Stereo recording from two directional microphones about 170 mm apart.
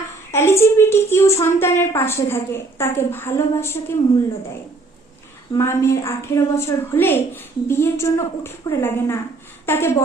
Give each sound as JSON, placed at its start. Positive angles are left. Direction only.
{"t": 0.3, "sound": "a woman's voice", "side_deg": 15}
{"t": 5.5, "sound": "a woman's voice", "side_deg": 15}